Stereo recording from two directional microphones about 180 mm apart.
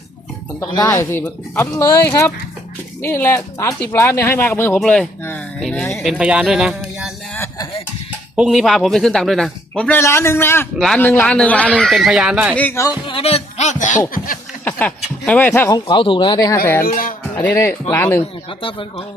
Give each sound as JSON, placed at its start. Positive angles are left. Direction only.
{"t": 0.6, "sound": "speech", "side_deg": 20}
{"t": 6.0, "sound": "speech", "side_deg": -5}
{"t": 7.3, "sound": "a sound", "side_deg": 15}
{"t": 8.4, "sound": "speech", "side_deg": 0}
{"t": 12.5, "sound": "speech", "side_deg": 10}
{"t": 14.6, "sound": "speech", "side_deg": 10}
{"t": 15.9, "sound": "speech", "side_deg": 25}
{"t": 16.8, "sound": "speech", "side_deg": 50}
{"t": 17.4, "sound": "speech", "side_deg": 15}
{"t": 18.6, "sound": "speech", "side_deg": 30}